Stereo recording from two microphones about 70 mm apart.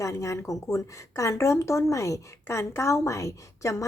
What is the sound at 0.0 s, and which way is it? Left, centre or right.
A woman's voice, left.